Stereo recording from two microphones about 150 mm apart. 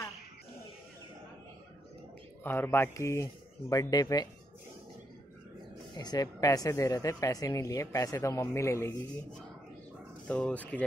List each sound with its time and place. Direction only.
2.4 s speech: 15° left (ahead or behind)
5.9 s speech: 25° left (ahead or behind)
10.2 s speech: 10° left (ahead or behind)